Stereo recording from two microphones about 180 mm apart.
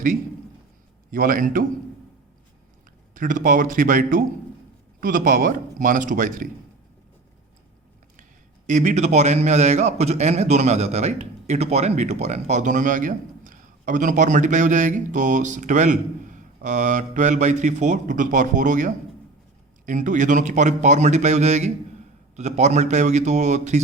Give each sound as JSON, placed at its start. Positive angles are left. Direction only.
{"t": 1.1, "sound": "a man's voice", "side_deg": -50}
{"t": 3.2, "sound": "a man's voice", "side_deg": -50}
{"t": 8.6, "sound": "a man's voice", "side_deg": -45}